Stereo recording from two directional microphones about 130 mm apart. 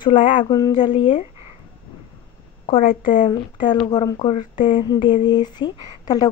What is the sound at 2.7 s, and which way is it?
Speech, 90° left.